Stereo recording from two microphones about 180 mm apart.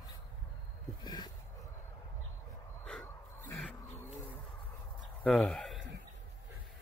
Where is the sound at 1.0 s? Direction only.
25° left (ahead or behind).